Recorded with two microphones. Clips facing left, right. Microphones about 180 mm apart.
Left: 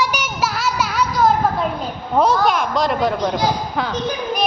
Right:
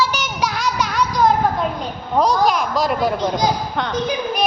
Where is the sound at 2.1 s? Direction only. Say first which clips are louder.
Even; 5° left (ahead or behind).